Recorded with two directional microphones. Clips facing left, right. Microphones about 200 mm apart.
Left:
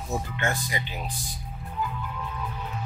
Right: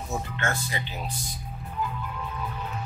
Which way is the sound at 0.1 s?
15° left (ahead or behind).